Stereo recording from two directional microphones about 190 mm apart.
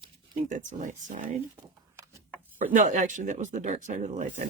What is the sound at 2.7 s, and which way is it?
Speech, 40° right (ahead or behind).